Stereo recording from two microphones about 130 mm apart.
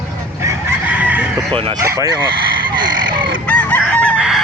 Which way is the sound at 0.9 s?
10° right (ahead or behind).